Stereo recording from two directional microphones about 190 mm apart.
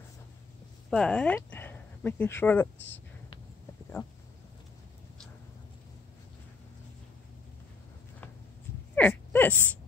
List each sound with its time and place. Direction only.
0.8 s speech: 5° left (ahead or behind)
4.0 s speech: 25° left (ahead or behind)
8.9 s a sound: 10° left (ahead or behind)